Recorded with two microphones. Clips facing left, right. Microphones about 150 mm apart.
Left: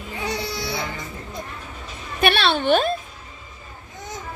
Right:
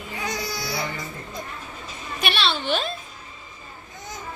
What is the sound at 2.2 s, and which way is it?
Speech, 55° left (ahead or behind).